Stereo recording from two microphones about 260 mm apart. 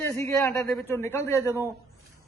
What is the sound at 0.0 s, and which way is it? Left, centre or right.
A man's voice, centre.